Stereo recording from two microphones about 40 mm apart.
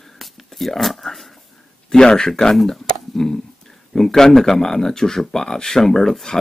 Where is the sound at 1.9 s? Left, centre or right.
Centre.